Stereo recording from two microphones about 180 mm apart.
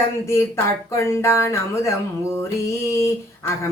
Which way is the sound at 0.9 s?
15° left (ahead or behind).